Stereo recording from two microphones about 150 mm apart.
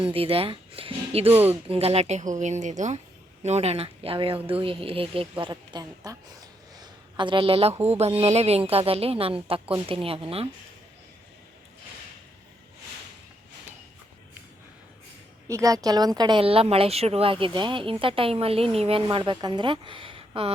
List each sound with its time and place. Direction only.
0.0 s speech: 40° right (ahead or behind)
1.3 s speech: 15° right (ahead or behind)
1.6 s speech: 40° right (ahead or behind)
6.1 s a sound: 25° right (ahead or behind)
7.9 s speech: 45° right (ahead or behind)
15.4 s speech: 20° right (ahead or behind); by 19.0 s 40° right (ahead or behind)
19.0 s speech: 30° right (ahead or behind)